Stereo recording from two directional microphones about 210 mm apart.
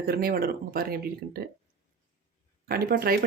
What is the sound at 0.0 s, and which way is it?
A woman's voice, 45° right (ahead or behind).